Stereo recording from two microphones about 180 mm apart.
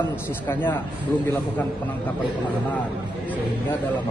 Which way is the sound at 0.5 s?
10° left (ahead or behind).